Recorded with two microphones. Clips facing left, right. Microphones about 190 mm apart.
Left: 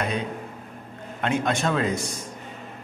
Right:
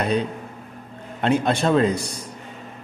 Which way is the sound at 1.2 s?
35° right (ahead or behind).